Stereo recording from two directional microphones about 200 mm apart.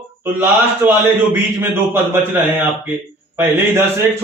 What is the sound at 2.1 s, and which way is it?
A man's voice, 10° right (ahead or behind).